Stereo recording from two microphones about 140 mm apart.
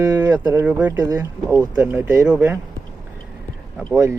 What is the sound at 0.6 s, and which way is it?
Speech, 10° right (ahead or behind).